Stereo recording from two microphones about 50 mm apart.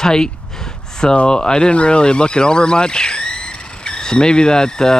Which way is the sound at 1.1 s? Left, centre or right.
Centre.